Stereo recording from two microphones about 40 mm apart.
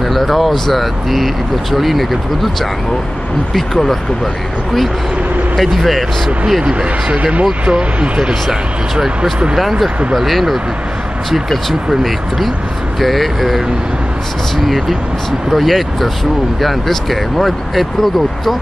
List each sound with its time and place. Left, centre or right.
0.1 s speech: centre
5.6 s speech: centre
6.6 s speech: right; by 10.6 s centre
11.9 s speech: centre
15.5 s speech: centre